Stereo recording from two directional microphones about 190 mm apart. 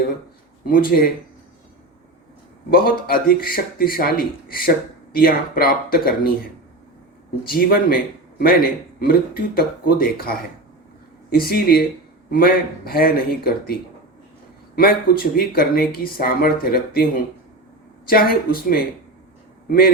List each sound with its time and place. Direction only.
0.6 s a man's voice: 50° left (ahead or behind)
2.6 s a man's voice: 50° left (ahead or behind)
7.4 s a man's voice: 50° left (ahead or behind)
14.8 s a man's voice: 50° left (ahead or behind)